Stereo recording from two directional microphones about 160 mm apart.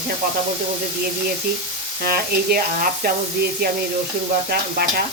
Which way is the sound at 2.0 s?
70° right (ahead or behind).